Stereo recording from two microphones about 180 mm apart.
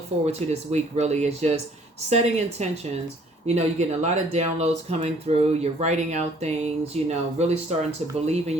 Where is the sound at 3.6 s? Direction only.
40° right (ahead or behind).